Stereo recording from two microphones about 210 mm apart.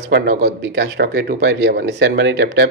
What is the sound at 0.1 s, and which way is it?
Speech, 50° right (ahead or behind).